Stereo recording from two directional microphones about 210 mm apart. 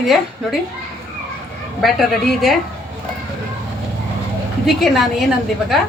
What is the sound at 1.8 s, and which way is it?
Speech, centre (ahead or behind).